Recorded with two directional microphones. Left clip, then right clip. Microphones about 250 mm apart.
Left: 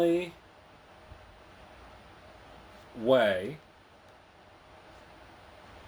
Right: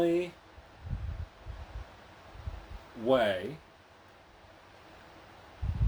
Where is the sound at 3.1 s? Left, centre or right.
Centre.